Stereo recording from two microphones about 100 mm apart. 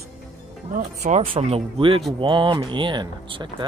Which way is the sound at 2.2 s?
55° right (ahead or behind).